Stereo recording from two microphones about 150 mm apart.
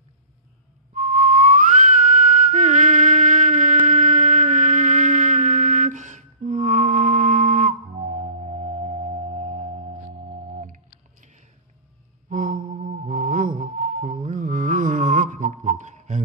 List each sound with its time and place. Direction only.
0.9 s whistling: 55° right (ahead or behind)
8.0 s music: 45° right (ahead or behind)
10.6 s music: 60° right (ahead or behind)
12.3 s mantra: 60° right (ahead or behind)